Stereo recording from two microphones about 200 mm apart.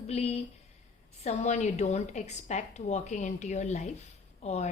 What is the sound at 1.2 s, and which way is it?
A woman's voice, 35° left (ahead or behind).